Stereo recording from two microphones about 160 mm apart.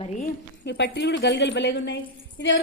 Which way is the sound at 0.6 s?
90° left.